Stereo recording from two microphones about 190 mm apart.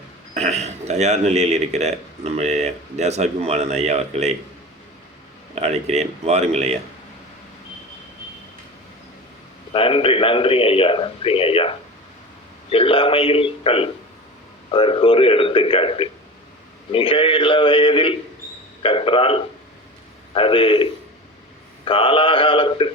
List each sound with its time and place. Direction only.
0.3 s speech: 35° right (ahead or behind)
5.5 s speech: 35° right (ahead or behind)
9.7 s a man's voice: 30° left (ahead or behind)
12.7 s a man's voice: 30° left (ahead or behind)
21.8 s a man's voice: 30° left (ahead or behind)